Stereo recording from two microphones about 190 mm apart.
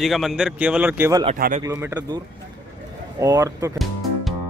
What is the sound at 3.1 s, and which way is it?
Speech, 15° right (ahead or behind).